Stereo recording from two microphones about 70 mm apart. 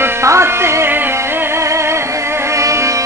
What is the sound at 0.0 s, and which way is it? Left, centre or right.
Music, right.